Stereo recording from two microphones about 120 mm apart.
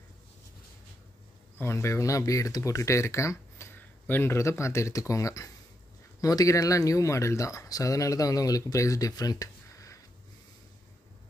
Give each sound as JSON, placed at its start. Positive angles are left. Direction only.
{"t": 1.6, "sound": "speech", "side_deg": 20}